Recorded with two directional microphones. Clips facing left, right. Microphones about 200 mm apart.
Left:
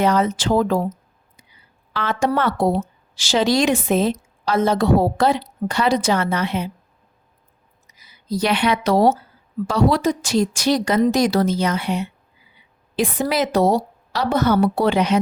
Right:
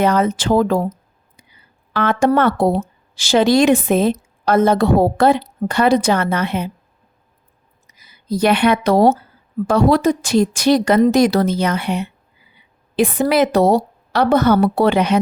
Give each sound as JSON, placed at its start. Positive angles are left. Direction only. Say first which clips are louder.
{"t": 0.0, "sound": "a woman's voice", "louder": "right 2 dB", "side_deg": -55}
{"t": 1.9, "sound": "a woman's voice", "louder": "right 5 dB", "side_deg": -55}
{"t": 7.9, "sound": "a woman's voice", "louder": "right 3 dB", "side_deg": -55}